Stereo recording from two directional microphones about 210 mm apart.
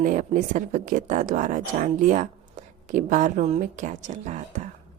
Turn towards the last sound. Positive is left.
turn(degrees=-35)  # may be behind; listen again after turning